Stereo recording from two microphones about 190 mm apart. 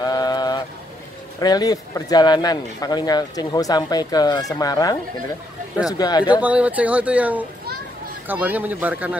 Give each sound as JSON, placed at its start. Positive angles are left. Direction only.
{"t": 0.0, "sound": "boat", "side_deg": 20}
{"t": 1.4, "sound": "speech", "side_deg": 20}
{"t": 6.4, "sound": "speech", "side_deg": -5}